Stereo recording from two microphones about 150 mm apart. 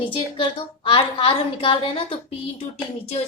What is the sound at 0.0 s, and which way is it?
A woman's voice, 35° left (ahead or behind).